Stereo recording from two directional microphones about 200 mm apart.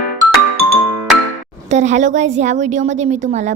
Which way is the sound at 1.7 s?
35° right (ahead or behind).